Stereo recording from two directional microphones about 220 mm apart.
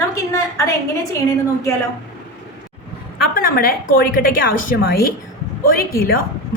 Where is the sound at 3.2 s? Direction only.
40° left (ahead or behind).